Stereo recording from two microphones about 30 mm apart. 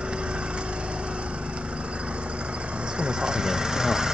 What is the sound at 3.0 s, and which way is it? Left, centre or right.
Vehicle, right.